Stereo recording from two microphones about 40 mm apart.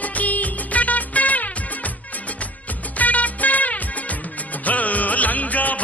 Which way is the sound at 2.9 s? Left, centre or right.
Left.